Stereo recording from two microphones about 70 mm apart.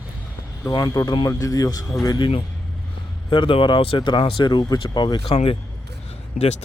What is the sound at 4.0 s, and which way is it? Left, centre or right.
Speech, left.